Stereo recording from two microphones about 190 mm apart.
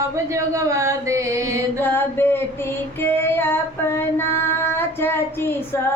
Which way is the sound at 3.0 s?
10° left (ahead or behind).